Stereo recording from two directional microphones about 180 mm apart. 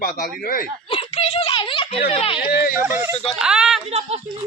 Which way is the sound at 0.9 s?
30° left (ahead or behind).